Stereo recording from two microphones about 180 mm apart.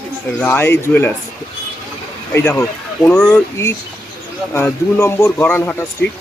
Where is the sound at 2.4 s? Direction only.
15° left (ahead or behind).